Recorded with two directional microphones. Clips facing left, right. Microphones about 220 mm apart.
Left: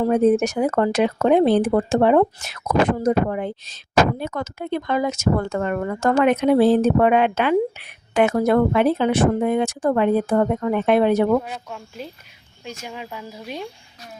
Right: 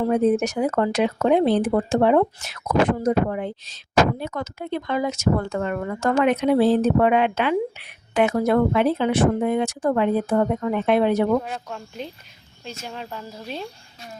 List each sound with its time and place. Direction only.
0.1 s speech: 50° left (ahead or behind)
11.4 s speech: 5° left (ahead or behind)